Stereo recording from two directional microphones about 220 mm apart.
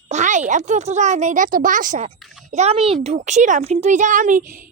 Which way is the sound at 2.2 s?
Centre (ahead or behind).